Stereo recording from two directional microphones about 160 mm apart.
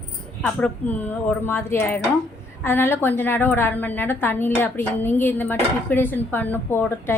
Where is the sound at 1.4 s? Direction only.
15° left (ahead or behind).